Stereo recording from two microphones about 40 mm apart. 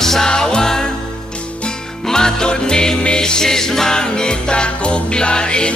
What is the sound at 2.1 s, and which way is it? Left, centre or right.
Music, centre.